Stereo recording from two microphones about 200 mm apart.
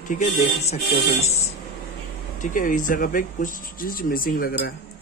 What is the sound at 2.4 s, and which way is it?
Speech, 40° left (ahead or behind).